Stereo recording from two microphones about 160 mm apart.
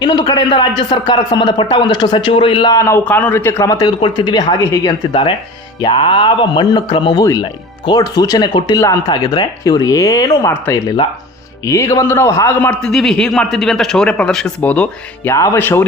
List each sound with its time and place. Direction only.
0.0 s a man's voice: 25° left (ahead or behind)
5.8 s a man's voice: 35° left (ahead or behind); by 12.7 s 15° left (ahead or behind)
12.8 s speech: centre (ahead or behind)